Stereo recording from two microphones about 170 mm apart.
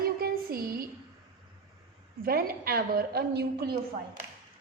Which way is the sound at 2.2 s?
60° right (ahead or behind).